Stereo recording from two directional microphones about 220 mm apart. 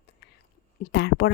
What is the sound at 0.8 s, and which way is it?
Speech, 50° left (ahead or behind).